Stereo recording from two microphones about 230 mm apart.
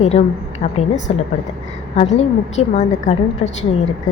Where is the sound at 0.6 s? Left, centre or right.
Left.